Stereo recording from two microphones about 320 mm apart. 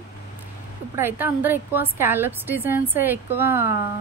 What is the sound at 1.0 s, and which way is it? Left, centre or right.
A woman's voice, centre.